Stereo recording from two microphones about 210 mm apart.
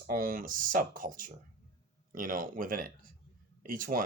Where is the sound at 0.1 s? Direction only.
40° right (ahead or behind).